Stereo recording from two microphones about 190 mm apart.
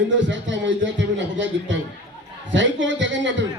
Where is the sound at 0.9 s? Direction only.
75° right (ahead or behind).